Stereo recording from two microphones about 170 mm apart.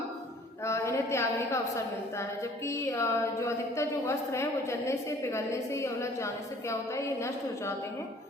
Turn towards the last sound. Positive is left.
turn(degrees=15)  # may be behind; listen again after turning